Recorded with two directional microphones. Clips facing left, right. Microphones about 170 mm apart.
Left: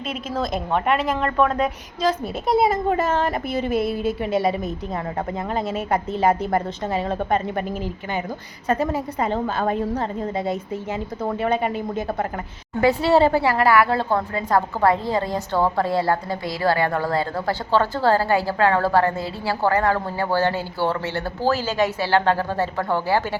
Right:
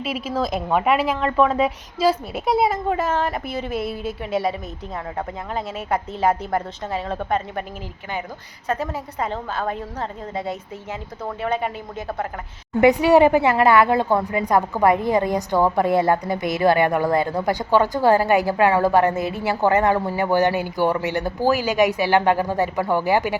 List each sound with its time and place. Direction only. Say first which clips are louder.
0.1 s a woman's voice: right 1 dB; 10° right (ahead or behind)
5.9 s a woman's voice: even; 5° right (ahead or behind)
8.6 s a woman's voice: left 4 dB; centre (ahead or behind)
11.4 s a woman's voice: left 1 dB; centre (ahead or behind)
12.8 s a woman's voice: right 3 dB; 15° right (ahead or behind)